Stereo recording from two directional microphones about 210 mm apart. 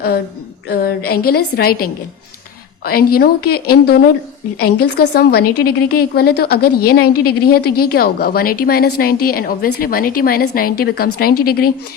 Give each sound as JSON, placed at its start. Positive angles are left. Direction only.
{"t": 0.7, "sound": "a woman's voice", "side_deg": 45}